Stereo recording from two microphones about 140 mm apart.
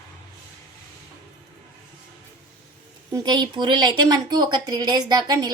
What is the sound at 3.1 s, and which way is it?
Speech, 25° right (ahead or behind).